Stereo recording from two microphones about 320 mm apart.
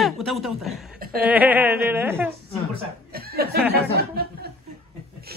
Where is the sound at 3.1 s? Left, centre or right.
Right.